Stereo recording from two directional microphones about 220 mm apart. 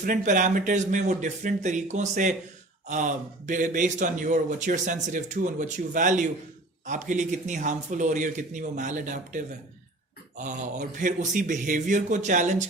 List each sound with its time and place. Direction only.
0.0 s a man's voice: 35° right (ahead or behind)